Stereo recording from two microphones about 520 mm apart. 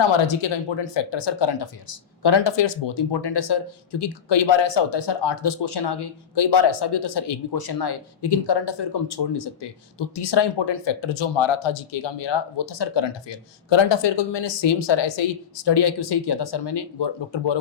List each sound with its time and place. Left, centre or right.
0.4 s speech: left